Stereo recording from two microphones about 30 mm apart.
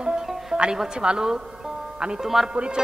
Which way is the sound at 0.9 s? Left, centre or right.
Right.